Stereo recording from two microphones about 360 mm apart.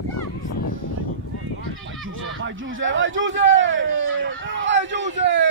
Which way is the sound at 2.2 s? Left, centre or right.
Right.